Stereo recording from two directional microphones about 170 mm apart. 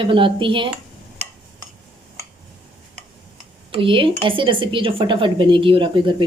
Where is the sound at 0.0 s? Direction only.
30° right (ahead or behind).